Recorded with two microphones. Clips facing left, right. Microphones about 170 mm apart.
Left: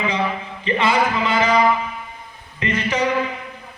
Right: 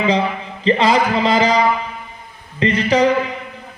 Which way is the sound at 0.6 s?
35° right (ahead or behind).